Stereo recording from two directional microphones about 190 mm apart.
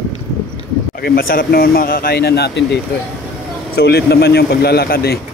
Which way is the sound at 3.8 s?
60° left (ahead or behind).